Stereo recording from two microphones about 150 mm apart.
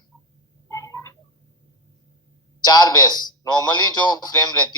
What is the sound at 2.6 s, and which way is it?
Speech, 25° left (ahead or behind).